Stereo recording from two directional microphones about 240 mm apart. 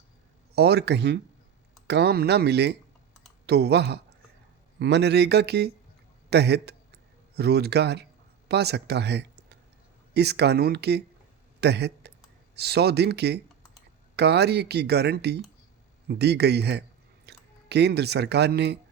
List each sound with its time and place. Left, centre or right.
0.5 s speech: right